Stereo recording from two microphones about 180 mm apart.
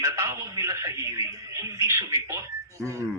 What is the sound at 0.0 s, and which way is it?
A man's voice, 15° right (ahead or behind).